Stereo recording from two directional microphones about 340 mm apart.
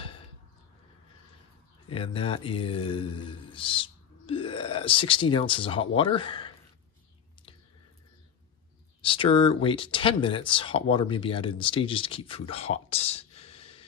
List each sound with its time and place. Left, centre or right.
1.9 s speech: centre
9.0 s speech: centre